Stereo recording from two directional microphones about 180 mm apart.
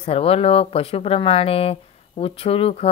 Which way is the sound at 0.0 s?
35° left (ahead or behind).